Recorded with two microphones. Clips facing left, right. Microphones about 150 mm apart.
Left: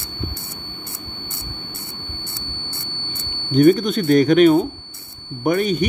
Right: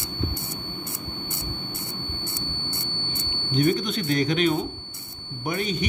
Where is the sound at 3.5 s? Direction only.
50° left (ahead or behind).